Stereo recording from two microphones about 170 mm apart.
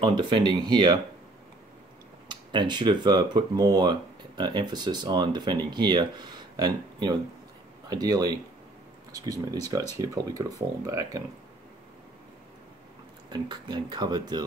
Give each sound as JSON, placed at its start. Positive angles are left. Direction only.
{"t": 0.0, "sound": "speech", "side_deg": -30}
{"t": 2.2, "sound": "speech", "side_deg": -25}
{"t": 13.3, "sound": "speech", "side_deg": -25}